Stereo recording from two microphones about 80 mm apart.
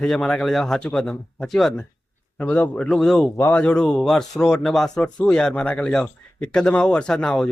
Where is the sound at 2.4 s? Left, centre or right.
Centre.